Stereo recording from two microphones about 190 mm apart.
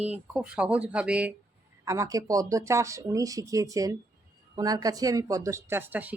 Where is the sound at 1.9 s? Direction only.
15° right (ahead or behind).